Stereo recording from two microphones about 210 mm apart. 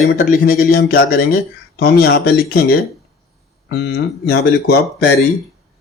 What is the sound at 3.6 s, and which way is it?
A man's voice, 50° left (ahead or behind).